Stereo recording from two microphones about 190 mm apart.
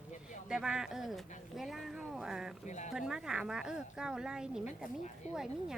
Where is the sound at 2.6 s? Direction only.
40° left (ahead or behind).